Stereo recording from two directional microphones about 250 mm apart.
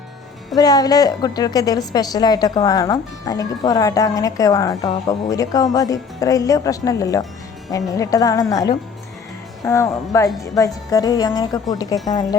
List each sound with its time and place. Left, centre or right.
0.5 s a woman's voice: centre